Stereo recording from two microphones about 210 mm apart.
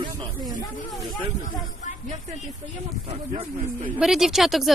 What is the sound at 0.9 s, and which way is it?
Speech, centre (ahead or behind).